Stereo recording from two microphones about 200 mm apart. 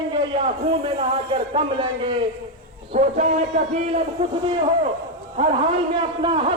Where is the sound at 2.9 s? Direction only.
35° right (ahead or behind).